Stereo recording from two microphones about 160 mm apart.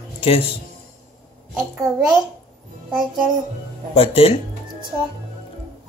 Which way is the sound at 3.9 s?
40° left (ahead or behind).